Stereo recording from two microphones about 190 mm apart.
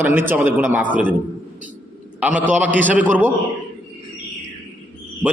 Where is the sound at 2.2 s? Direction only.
10° right (ahead or behind).